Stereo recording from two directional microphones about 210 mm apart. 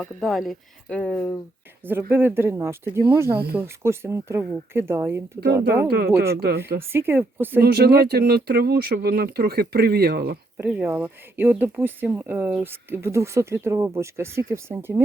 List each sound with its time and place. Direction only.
0.0 s speech: centre (ahead or behind)
1.8 s speech: 10° right (ahead or behind)
6.3 s speech: 50° right (ahead or behind)
6.9 s speech: 10° right (ahead or behind)
7.6 s speech: 50° right (ahead or behind)
10.6 s speech: 10° right (ahead or behind)